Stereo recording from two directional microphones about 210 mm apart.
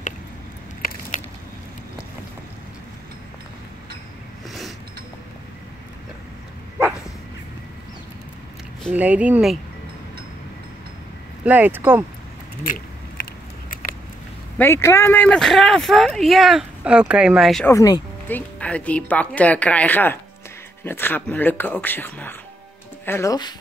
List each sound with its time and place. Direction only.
0.8 s keys jangling: 45° left (ahead or behind)
4.5 s a sound: centre (ahead or behind)
8.9 s speech: 5° right (ahead or behind)
11.4 s speech: 10° right (ahead or behind)
14.6 s speech: 10° left (ahead or behind)
17.6 s speech: 15° left (ahead or behind)